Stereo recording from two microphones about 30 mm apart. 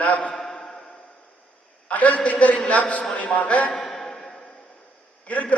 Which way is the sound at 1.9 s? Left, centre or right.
Left.